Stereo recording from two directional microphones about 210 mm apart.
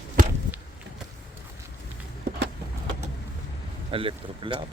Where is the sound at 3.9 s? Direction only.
25° right (ahead or behind).